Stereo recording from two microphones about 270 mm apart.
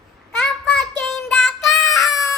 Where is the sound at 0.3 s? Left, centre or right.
Centre.